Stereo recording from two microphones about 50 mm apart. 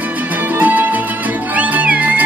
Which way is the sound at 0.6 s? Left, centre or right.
Right.